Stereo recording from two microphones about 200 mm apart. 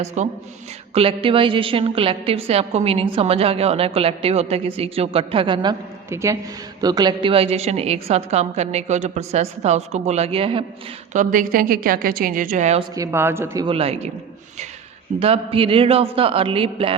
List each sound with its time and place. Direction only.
0.0 s a woman's voice: 35° right (ahead or behind)
6.8 s a woman's voice: 20° right (ahead or behind)
11.1 s a woman's voice: 40° right (ahead or behind)
13.0 s a man's voice: 10° right (ahead or behind)
13.7 s a woman's voice: 30° right (ahead or behind)
15.2 s a woman's voice: 30° right (ahead or behind)